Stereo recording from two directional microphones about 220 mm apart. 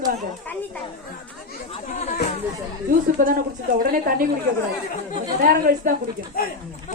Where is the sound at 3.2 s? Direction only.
40° right (ahead or behind).